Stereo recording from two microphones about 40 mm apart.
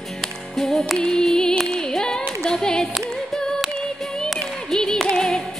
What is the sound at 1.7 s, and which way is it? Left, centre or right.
A capella, centre.